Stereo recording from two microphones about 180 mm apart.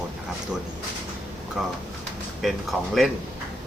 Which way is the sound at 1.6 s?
Centre (ahead or behind).